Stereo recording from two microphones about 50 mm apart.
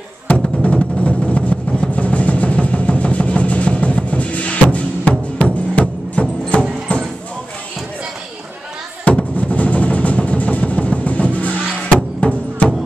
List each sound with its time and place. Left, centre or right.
0.6 s music: left
6.9 s a sound: left
9.0 s music: left